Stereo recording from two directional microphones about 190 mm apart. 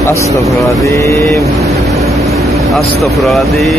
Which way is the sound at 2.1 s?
Centre (ahead or behind).